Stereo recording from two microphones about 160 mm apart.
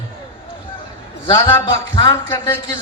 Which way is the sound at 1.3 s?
30° left (ahead or behind).